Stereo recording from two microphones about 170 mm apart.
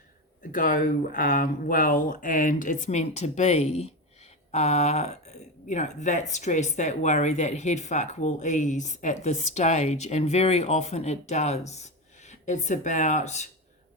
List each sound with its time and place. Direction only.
0.5 s speech: 55° left (ahead or behind)